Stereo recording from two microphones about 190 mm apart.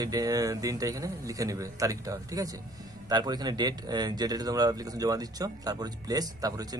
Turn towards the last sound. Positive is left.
turn(degrees=-20)  # may be behind; listen again after turning